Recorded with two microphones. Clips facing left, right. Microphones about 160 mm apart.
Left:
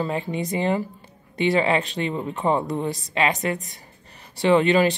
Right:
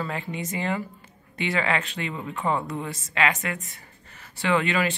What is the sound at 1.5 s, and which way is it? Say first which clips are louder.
Speech: left 3 dB; 20° left (ahead or behind).